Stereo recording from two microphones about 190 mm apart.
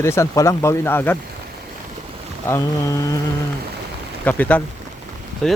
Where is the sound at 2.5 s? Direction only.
15° left (ahead or behind).